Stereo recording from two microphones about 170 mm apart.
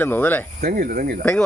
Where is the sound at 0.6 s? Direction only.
60° right (ahead or behind).